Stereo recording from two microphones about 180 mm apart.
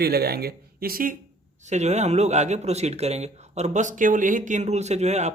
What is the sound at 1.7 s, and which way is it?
Speech, 40° right (ahead or behind).